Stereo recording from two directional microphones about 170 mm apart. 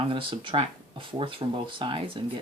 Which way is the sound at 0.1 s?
30° right (ahead or behind).